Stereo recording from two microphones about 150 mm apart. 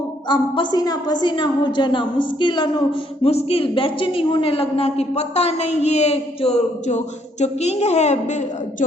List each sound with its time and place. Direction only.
0.3 s a woman's voice: 30° left (ahead or behind)
3.2 s a woman's voice: 40° left (ahead or behind)